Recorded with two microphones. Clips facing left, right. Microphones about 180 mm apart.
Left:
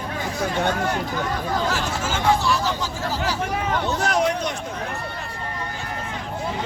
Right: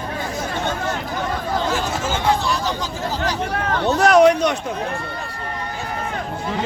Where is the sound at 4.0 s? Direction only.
75° right (ahead or behind).